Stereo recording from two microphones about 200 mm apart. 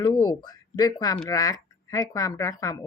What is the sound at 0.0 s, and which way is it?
Speech, 15° left (ahead or behind).